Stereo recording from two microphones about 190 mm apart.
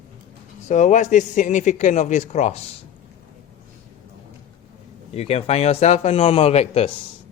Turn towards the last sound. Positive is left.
turn(degrees=30)  # may be behind; listen again after turning